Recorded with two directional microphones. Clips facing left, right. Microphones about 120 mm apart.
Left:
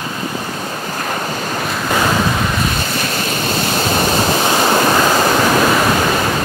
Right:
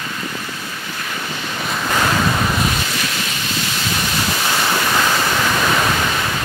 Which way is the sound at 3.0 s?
45° left (ahead or behind).